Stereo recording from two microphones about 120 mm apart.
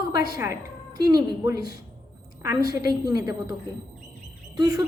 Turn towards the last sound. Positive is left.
turn(degrees=-30)  # may be behind; listen again after turning